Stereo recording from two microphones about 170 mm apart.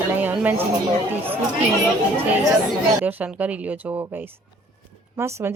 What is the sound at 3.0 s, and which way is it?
Speech, 10° right (ahead or behind).